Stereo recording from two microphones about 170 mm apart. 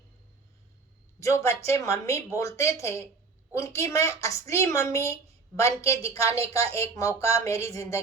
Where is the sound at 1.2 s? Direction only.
15° left (ahead or behind).